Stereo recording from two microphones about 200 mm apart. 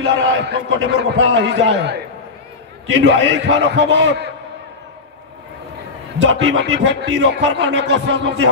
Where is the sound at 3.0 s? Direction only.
60° right (ahead or behind).